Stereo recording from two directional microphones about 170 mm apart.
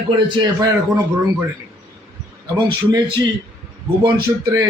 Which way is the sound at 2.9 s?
25° right (ahead or behind).